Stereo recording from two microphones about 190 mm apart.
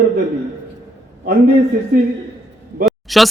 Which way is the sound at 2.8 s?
Centre (ahead or behind).